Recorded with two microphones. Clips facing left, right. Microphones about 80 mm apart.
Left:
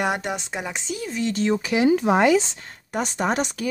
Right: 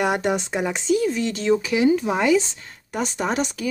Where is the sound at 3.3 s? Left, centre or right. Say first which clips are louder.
Even; left.